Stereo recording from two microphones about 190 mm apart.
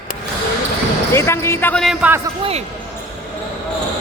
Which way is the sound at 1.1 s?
15° left (ahead or behind).